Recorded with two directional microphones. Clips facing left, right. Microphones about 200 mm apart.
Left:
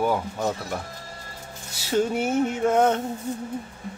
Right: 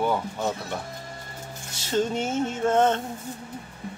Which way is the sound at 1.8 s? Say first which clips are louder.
Left 2 dB; 10° left (ahead or behind).